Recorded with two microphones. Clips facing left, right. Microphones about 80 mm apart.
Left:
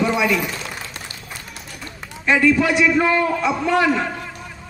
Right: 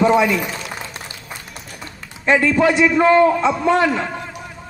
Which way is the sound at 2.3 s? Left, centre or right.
Right.